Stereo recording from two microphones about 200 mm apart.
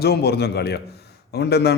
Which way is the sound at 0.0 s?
55° left (ahead or behind).